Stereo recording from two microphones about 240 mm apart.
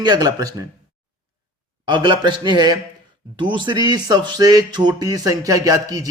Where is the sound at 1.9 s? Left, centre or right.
Centre.